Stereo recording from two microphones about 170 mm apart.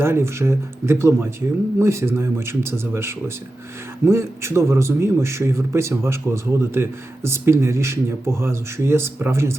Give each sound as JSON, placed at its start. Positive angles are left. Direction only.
{"t": 0.0, "sound": "a man's voice", "side_deg": -15}